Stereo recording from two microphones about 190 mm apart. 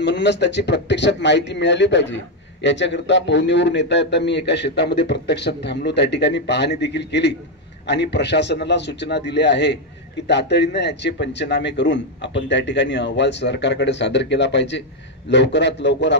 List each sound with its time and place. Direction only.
0.0 s a man's voice: 65° left (ahead or behind)